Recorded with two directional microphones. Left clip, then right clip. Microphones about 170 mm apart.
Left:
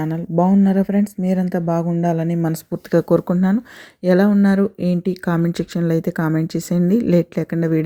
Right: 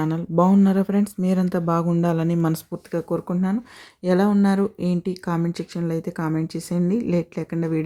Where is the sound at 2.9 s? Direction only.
35° left (ahead or behind).